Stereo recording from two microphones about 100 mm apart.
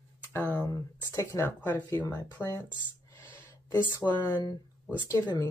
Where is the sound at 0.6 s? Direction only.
35° left (ahead or behind).